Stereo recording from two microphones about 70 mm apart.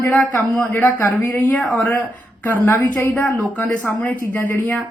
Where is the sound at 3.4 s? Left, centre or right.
Left.